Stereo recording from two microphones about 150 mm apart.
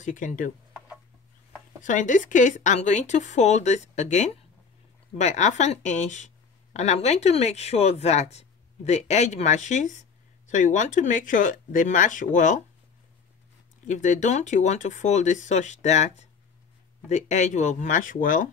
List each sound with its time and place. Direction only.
0.0 s speech: 60° left (ahead or behind)
1.8 s a woman's voice: 60° left (ahead or behind)
13.8 s a woman's voice: 55° left (ahead or behind)